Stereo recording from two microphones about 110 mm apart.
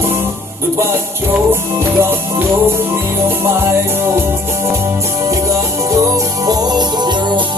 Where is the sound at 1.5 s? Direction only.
20° right (ahead or behind).